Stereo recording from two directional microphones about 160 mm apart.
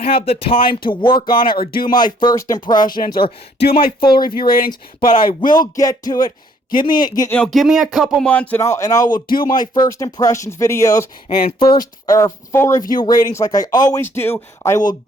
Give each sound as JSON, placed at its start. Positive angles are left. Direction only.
{"t": 0.2, "sound": "speech", "side_deg": 35}
{"t": 1.3, "sound": "speech", "side_deg": 65}
{"t": 2.2, "sound": "speech", "side_deg": 20}
{"t": 3.7, "sound": "speech", "side_deg": 70}
{"t": 4.0, "sound": "speech", "side_deg": 30}
{"t": 4.4, "sound": "speech", "side_deg": 65}
{"t": 4.7, "sound": "speech", "side_deg": 35}
{"t": 5.4, "sound": "speech", "side_deg": 60}
{"t": 5.7, "sound": "speech", "side_deg": 20}
{"t": 7.3, "sound": "speech", "side_deg": 5}
{"t": 9.0, "sound": "speech", "side_deg": 60}
{"t": 9.5, "sound": "speech", "side_deg": 25}
{"t": 11.4, "sound": "speech", "side_deg": 30}